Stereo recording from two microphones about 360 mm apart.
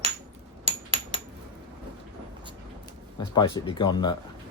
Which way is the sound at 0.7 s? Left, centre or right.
Centre.